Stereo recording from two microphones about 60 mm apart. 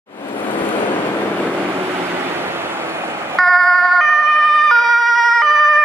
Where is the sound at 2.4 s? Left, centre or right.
Right.